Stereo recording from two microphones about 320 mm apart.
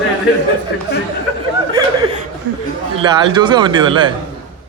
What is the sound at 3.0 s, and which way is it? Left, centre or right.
Speech, centre.